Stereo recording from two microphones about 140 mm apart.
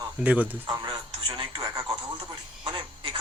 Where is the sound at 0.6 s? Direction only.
30° right (ahead or behind).